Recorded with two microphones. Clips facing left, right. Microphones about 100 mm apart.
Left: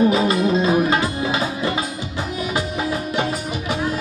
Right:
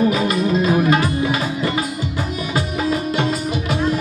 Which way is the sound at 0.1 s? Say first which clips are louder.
Left 1 dB; 25° left (ahead or behind).